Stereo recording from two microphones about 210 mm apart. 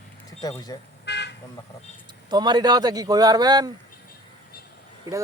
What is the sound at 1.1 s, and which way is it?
Toot, 55° left (ahead or behind).